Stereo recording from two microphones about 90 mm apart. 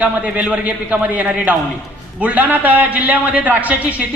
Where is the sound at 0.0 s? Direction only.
15° right (ahead or behind).